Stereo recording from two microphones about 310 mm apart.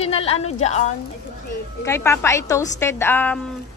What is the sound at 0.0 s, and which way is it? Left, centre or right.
Speech, centre.